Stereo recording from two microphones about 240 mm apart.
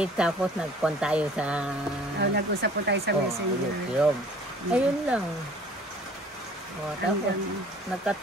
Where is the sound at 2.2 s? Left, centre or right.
Right.